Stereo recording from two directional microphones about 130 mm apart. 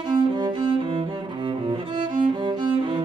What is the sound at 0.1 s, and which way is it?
Cello, 35° right (ahead or behind).